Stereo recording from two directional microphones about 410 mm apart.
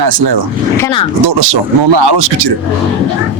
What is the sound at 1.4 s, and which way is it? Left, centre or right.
Speech, right.